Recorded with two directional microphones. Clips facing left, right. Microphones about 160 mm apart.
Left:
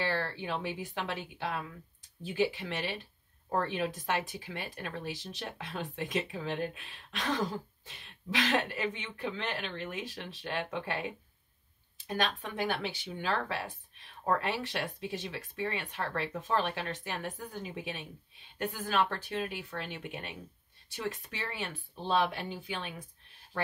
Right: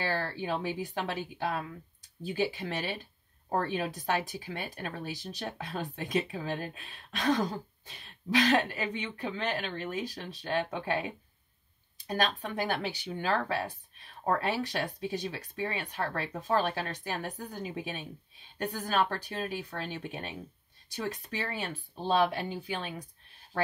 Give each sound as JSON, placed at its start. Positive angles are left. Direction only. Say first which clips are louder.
{"t": 0.0, "sound": "speech", "louder": "right 1 dB", "side_deg": -40}
{"t": 12.1, "sound": "speech", "louder": "right 2 dB", "side_deg": -40}